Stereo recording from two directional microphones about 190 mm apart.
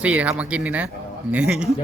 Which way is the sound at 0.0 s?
5° right (ahead or behind).